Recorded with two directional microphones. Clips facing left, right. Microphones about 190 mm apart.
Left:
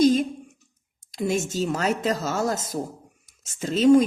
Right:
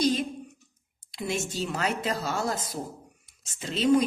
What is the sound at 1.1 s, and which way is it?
A woman's voice, 45° left (ahead or behind).